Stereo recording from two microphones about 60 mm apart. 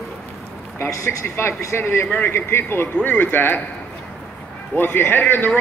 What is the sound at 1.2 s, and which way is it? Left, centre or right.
A man's voice, left.